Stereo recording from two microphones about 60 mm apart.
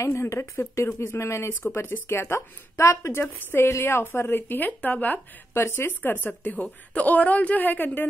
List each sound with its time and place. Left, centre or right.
0.0 s speech: left
1.6 s speech: left
3.1 s speech: left
5.5 s speech: left